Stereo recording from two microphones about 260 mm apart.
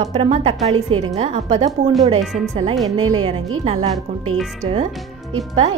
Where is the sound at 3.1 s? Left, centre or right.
Right.